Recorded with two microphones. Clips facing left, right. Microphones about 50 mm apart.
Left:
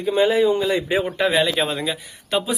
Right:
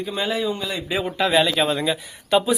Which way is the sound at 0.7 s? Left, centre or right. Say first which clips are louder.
Left 5 dB; left.